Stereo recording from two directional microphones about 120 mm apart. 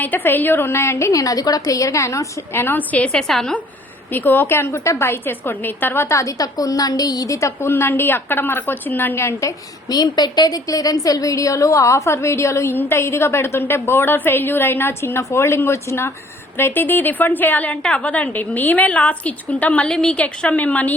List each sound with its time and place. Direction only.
0.0 s a woman's voice: 15° left (ahead or behind)
4.1 s a woman's voice: 15° left (ahead or behind)